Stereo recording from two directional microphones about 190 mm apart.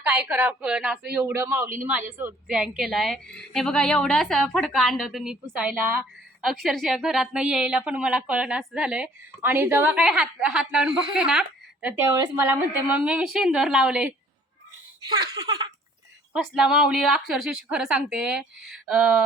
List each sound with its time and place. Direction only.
0.0 s a woman's voice: 5° right (ahead or behind)
15.0 s giggle: 20° right (ahead or behind)
16.3 s a woman's voice: 5° right (ahead or behind)